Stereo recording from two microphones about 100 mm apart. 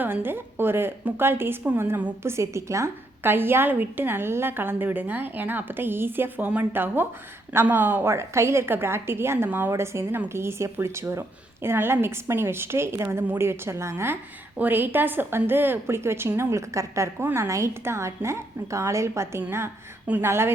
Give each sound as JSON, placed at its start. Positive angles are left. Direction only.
{"t": 0.0, "sound": "a woman's voice", "side_deg": -20}